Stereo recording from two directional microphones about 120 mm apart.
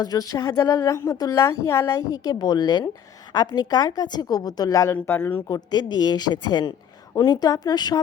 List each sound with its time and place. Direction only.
0.0 s speech: 30° left (ahead or behind)
4.9 s speech: 15° left (ahead or behind)
5.5 s speech: 35° left (ahead or behind)